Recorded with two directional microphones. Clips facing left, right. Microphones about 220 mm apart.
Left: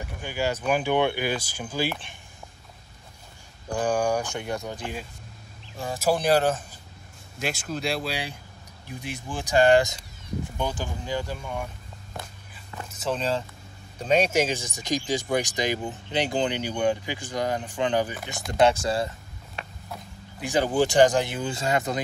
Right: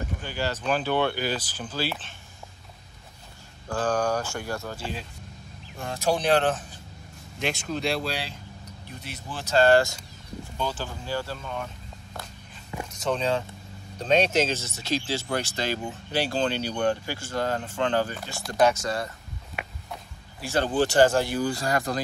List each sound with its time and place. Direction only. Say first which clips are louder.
0.2 s speech: left 5 dB; 10° left (ahead or behind)
3.6 s speech: left 1 dB; 15° left (ahead or behind)
5.8 s speech: left 1 dB; 5° left (ahead or behind); by 19.0 s 30° left (ahead or behind)
20.3 s speech: left 1 dB; 15° left (ahead or behind)